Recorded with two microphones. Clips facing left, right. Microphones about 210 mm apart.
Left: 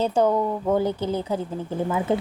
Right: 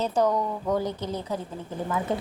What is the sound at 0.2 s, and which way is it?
A woman's voice, 30° left (ahead or behind).